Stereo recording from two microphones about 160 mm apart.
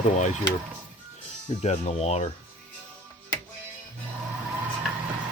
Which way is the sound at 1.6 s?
45° left (ahead or behind).